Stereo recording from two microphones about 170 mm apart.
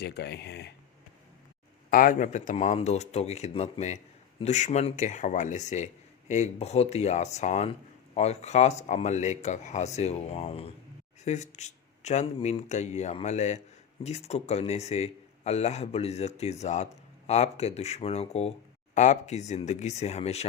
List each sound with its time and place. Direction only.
0.0 s speech: 75° left (ahead or behind)
1.9 s a man's voice: 55° left (ahead or behind)